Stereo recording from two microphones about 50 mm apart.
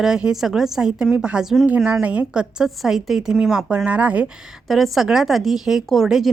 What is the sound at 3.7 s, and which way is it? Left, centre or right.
Speech, right.